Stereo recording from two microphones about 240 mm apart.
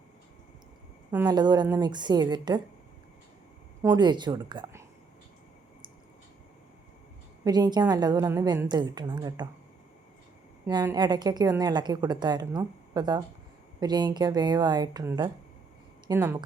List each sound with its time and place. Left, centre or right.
1.1 s a woman's voice: centre
3.8 s a woman's voice: centre
7.4 s a woman's voice: centre
10.7 s a woman's voice: centre